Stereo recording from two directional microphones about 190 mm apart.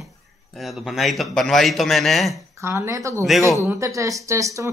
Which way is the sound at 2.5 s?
15° right (ahead or behind).